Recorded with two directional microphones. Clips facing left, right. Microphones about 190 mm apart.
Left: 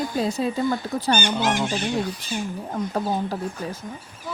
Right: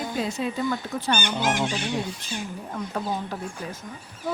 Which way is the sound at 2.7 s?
35° left (ahead or behind).